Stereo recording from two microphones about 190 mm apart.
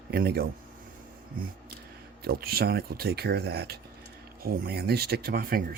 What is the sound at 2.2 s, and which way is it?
Speech, 55° right (ahead or behind).